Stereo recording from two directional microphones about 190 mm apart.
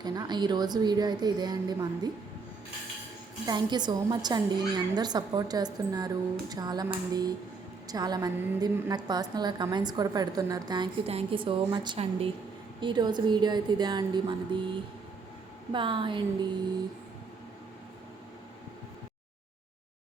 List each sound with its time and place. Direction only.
0.0 s a woman's voice: 20° right (ahead or behind)
3.4 s a woman's voice: 20° right (ahead or behind)
15.7 s a woman's voice: 25° right (ahead or behind)